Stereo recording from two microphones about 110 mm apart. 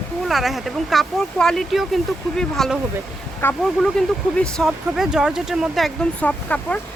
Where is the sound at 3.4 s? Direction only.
20° left (ahead or behind).